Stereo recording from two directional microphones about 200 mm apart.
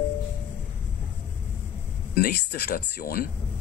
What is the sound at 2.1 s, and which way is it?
Speech, 55° left (ahead or behind).